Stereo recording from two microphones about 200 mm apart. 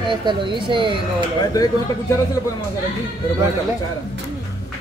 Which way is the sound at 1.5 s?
15° left (ahead or behind).